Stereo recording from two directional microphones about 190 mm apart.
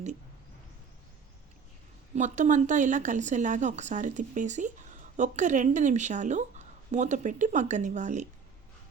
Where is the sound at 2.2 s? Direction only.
40° right (ahead or behind).